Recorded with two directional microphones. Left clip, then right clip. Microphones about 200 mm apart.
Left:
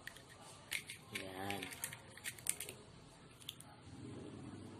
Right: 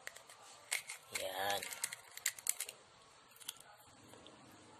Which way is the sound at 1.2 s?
45° right (ahead or behind).